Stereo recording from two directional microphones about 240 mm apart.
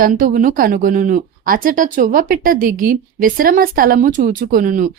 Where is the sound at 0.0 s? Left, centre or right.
Right.